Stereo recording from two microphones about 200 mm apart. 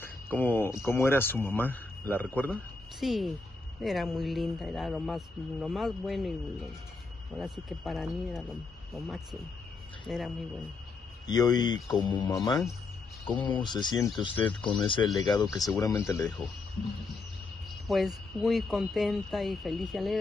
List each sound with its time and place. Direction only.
0.0 s speech: 10° left (ahead or behind)
7.3 s speech: centre (ahead or behind)
11.2 s speech: 20° left (ahead or behind)
15.4 s speech: centre (ahead or behind)
15.8 s speech: 15° left (ahead or behind)
16.2 s speech: 5° left (ahead or behind)
17.8 s speech: centre (ahead or behind)